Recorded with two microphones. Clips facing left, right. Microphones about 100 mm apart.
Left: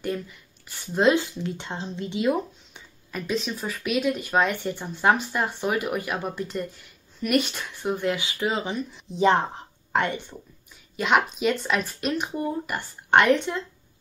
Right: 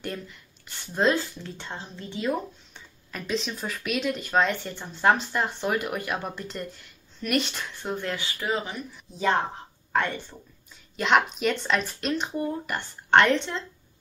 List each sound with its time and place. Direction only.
0.0 s speech: 5° left (ahead or behind)
3.1 s speech: 5° left (ahead or behind)
11.0 s speech: 5° left (ahead or behind)